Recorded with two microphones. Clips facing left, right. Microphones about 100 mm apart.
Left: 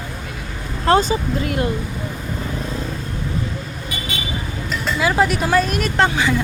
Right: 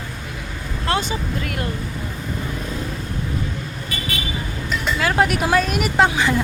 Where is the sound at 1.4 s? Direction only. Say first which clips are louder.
Left 5 dB; 25° left (ahead or behind).